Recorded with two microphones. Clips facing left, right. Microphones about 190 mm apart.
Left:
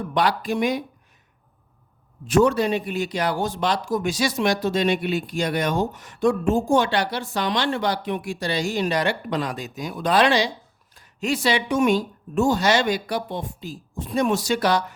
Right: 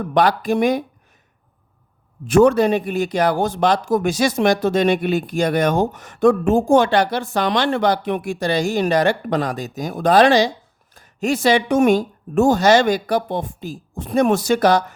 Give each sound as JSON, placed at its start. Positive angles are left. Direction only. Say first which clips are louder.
{"t": 0.1, "sound": "a man's voice", "louder": "right 6 dB", "side_deg": -50}
{"t": 2.2, "sound": "a man's voice", "louder": "right 5 dB", "side_deg": -55}